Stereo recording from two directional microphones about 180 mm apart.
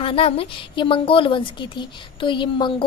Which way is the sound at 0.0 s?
30° left (ahead or behind).